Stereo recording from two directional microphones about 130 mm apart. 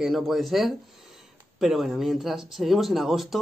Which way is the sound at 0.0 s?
Centre (ahead or behind).